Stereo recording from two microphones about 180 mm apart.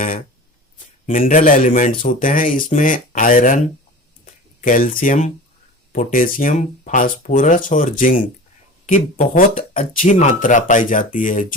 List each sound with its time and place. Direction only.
1.0 s speech: 50° left (ahead or behind)